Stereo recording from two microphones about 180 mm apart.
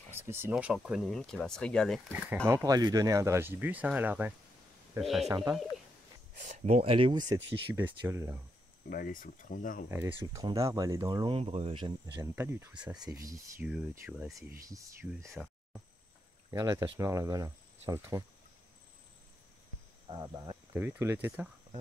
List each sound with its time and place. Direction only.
0.1 s speech: 15° right (ahead or behind); by 2.0 s 5° left (ahead or behind)
2.4 s speech: 15° right (ahead or behind); by 5.3 s centre (ahead or behind)
6.6 s speech: 35° right (ahead or behind)
7.7 s speech: 10° right (ahead or behind)
8.9 s speech: 50° left (ahead or behind)
9.8 s speech: 10° right (ahead or behind)
12.2 s speech: 15° right (ahead or behind)
15.1 s speech: centre (ahead or behind)
16.4 s speech: 20° right (ahead or behind)
20.1 s speech: 25° right (ahead or behind)
20.7 s speech: 10° right (ahead or behind)